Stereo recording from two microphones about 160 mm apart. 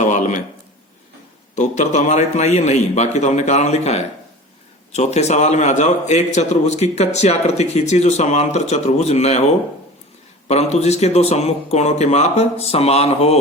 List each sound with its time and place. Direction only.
0.0 s a sound: 50° left (ahead or behind)
1.5 s a man's voice: 45° left (ahead or behind)
10.5 s a man's voice: 45° left (ahead or behind)